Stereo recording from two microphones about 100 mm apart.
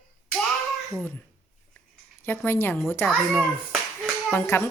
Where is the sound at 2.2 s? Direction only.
20° left (ahead or behind).